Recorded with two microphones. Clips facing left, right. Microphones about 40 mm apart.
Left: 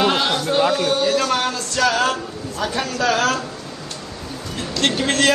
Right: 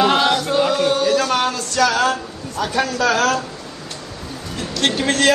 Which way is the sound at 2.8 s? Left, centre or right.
Right.